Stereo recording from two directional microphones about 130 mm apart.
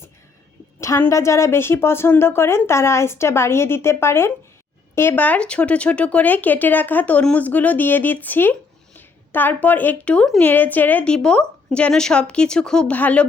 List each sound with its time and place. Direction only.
0.8 s a woman's voice: 20° left (ahead or behind)